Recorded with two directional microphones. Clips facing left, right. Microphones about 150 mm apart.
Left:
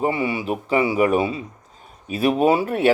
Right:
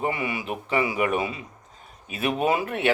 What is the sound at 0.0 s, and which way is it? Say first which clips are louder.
Speech: left 6 dB; 30° left (ahead or behind).